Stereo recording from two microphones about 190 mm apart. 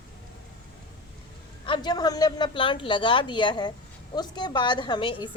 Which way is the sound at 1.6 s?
25° left (ahead or behind).